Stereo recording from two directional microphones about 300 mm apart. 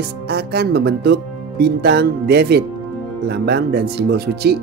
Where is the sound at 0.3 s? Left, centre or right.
Right.